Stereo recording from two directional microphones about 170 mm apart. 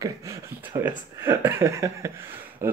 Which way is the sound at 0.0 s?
15° right (ahead or behind).